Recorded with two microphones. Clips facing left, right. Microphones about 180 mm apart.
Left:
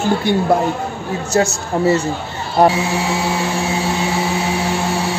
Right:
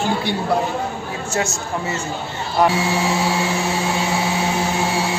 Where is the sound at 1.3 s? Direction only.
35° left (ahead or behind).